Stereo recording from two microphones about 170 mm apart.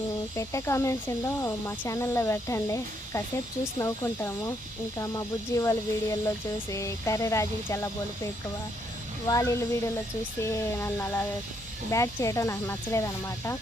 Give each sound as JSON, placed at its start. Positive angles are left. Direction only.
{"t": 0.3, "sound": "speech", "side_deg": 15}